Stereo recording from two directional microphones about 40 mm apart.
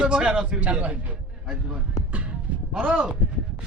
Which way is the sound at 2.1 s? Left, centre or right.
Right.